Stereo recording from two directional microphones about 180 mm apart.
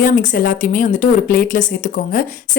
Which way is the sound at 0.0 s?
45° left (ahead or behind).